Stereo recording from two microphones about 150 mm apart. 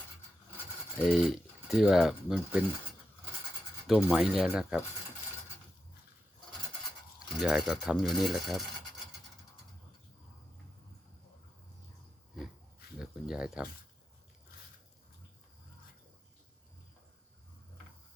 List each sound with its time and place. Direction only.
0.9 s mechanisms: centre (ahead or behind)
3.8 s mechanisms: centre (ahead or behind)
7.3 s mechanisms: centre (ahead or behind)
13.0 s cricket: 5° right (ahead or behind)